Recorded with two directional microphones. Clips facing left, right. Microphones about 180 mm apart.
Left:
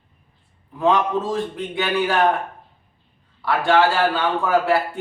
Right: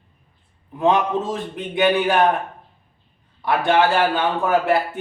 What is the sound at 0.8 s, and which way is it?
A man's voice, 20° right (ahead or behind).